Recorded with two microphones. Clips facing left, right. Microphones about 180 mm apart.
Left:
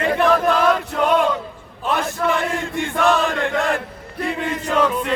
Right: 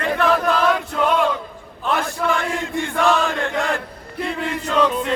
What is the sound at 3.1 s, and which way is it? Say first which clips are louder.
Chant: left 2 dB; 15° left (ahead or behind).